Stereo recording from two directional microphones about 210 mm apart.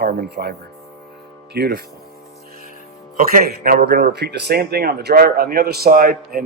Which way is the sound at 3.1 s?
45° right (ahead or behind).